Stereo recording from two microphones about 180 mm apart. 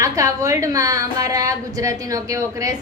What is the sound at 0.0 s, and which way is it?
A woman's voice, 15° right (ahead or behind).